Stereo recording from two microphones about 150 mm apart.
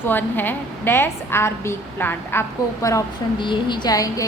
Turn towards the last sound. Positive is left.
turn(degrees=25)  # may be behind; listen again after turning